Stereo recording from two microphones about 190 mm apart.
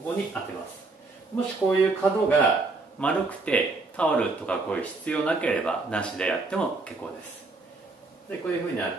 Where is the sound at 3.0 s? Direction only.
5° left (ahead or behind).